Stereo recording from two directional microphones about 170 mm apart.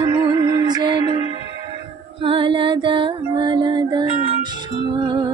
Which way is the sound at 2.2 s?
30° right (ahead or behind).